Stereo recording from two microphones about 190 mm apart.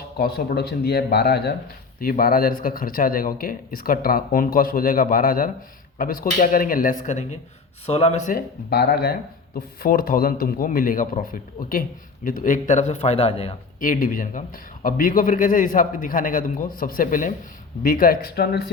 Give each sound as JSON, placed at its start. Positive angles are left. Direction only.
{"t": 0.2, "sound": "speech", "side_deg": 55}
{"t": 8.3, "sound": "speech", "side_deg": 55}
{"t": 13.7, "sound": "speech", "side_deg": 45}